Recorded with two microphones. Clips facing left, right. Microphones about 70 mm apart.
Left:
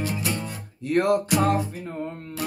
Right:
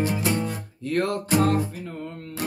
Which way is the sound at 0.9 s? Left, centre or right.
Centre.